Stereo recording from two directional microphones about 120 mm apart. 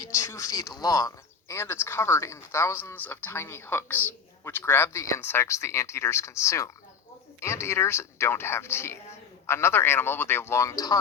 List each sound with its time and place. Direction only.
0.0 s speech: 25° left (ahead or behind)